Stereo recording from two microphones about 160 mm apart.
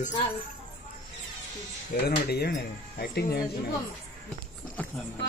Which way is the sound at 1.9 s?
85° left.